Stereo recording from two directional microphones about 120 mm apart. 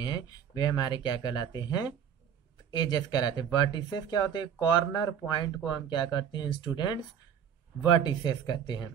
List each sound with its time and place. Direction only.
0.0 s speech: 35° left (ahead or behind)